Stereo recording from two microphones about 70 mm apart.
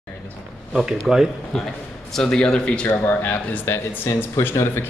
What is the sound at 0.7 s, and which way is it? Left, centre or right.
Speech, centre.